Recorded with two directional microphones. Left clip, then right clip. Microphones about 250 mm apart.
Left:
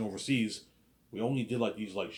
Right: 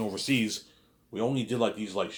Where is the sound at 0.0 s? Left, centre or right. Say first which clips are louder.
Right 4 dB; centre.